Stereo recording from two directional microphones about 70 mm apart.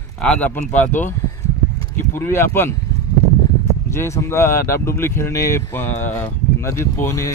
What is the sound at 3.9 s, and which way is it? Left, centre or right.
Speech, left.